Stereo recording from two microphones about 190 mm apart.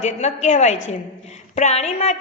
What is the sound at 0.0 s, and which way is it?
A woman's voice, 35° left (ahead or behind).